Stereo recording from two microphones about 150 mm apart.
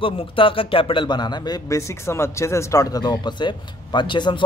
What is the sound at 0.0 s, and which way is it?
A man's voice, 35° left (ahead or behind).